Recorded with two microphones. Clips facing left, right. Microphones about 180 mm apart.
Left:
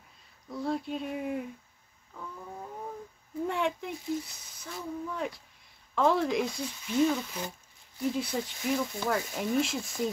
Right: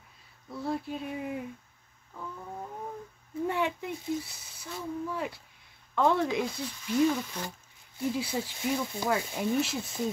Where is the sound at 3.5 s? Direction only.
5° right (ahead or behind).